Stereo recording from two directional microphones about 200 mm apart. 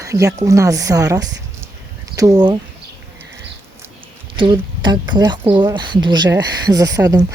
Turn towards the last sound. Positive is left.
turn(degrees=-15)  # may be behind; listen again after turning